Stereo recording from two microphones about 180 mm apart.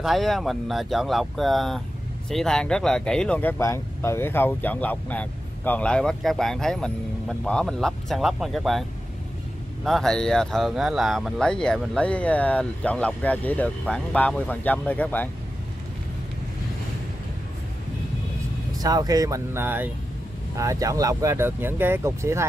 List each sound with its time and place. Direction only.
0.0 s speech: centre (ahead or behind)
9.8 s speech: centre (ahead or behind)
18.8 s speech: 20° right (ahead or behind)